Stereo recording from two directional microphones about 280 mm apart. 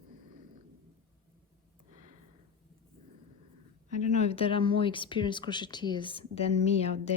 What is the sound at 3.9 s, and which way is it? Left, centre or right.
A woman's voice, left.